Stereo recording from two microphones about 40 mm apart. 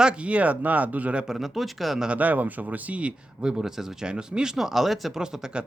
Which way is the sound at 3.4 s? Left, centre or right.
Centre.